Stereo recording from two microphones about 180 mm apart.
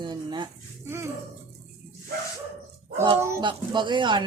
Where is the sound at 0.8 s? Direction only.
15° right (ahead or behind).